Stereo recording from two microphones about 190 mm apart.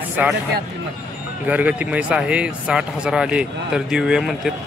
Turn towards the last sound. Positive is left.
turn(degrees=0)  # may be behind; listen again after turning